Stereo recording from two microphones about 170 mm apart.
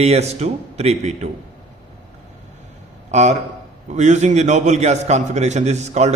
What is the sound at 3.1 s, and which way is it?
A man's voice, 40° right (ahead or behind).